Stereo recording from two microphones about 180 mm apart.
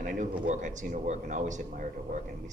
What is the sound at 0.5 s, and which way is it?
A man's voice, 45° right (ahead or behind).